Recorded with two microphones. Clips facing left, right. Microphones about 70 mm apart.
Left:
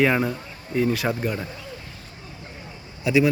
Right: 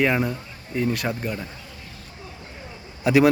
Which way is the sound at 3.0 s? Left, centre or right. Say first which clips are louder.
Right 3 dB; right.